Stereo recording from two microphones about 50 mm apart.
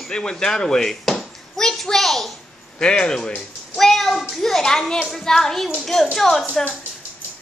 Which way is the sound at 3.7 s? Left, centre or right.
Centre.